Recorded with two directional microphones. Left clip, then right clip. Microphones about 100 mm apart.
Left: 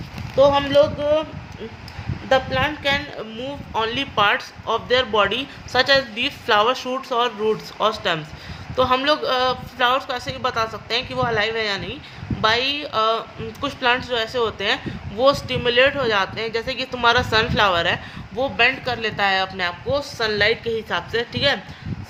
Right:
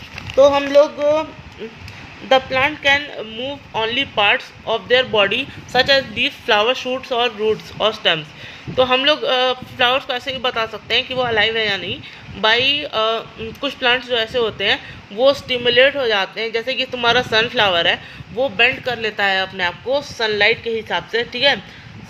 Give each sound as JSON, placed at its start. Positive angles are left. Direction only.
{"t": 2.3, "sound": "a woman's voice", "side_deg": -90}
{"t": 3.3, "sound": "a man's voice", "side_deg": -25}